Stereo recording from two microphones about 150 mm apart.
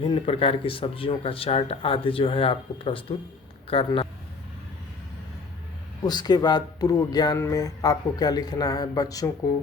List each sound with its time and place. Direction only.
0.0 s speech: 40° left (ahead or behind)
6.1 s speech: 25° left (ahead or behind)